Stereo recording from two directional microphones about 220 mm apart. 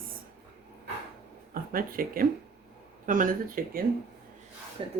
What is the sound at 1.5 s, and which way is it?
Speech, 40° right (ahead or behind).